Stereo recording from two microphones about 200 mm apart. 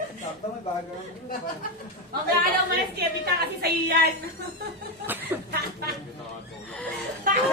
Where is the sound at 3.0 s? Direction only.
50° right (ahead or behind).